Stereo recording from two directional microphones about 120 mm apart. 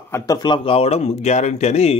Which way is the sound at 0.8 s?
60° left (ahead or behind).